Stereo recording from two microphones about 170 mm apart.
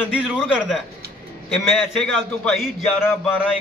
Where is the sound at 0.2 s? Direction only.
Centre (ahead or behind).